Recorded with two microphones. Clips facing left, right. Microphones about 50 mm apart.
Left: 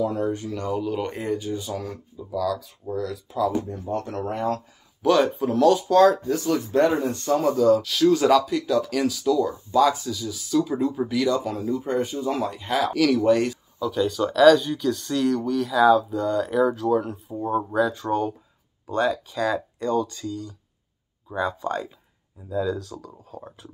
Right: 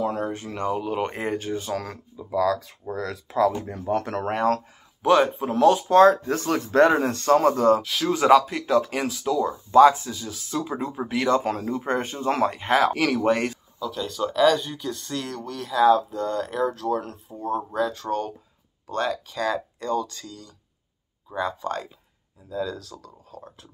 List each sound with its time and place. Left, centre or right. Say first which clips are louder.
0.0 s speech: left 2 dB; right
0.6 s speech: right 5 dB; right
1.3 s speech: even; right
3.6 s speech: right 3 dB; right
5.0 s speech: even; right
6.0 s speech: right 1 dB; right
7.4 s speech: even; right
7.8 s speech: left 4 dB; right
13.7 s speech: left 6 dB; centre
17.9 s speech: left 3 dB; centre